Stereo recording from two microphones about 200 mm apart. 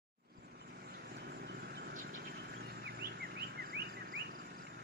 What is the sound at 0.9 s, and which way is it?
Vehicle, 55° right (ahead or behind).